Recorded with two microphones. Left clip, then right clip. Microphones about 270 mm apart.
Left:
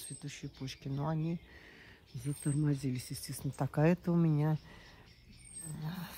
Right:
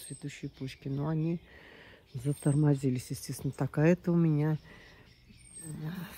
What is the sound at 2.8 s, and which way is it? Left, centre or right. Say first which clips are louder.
Speech: right 6 dB; centre.